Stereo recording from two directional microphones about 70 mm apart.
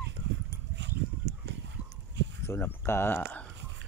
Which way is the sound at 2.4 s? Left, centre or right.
Left.